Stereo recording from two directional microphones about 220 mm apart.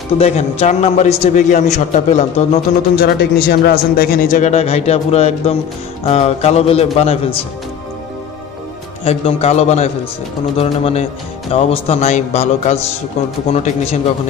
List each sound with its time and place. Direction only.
0.2 s speech: 30° left (ahead or behind)
3.0 s speech: 45° left (ahead or behind); by 7.3 s 25° left (ahead or behind)
9.0 s speech: 25° left (ahead or behind)